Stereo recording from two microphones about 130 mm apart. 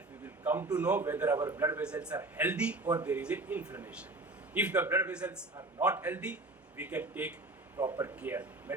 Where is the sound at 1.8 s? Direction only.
10° right (ahead or behind).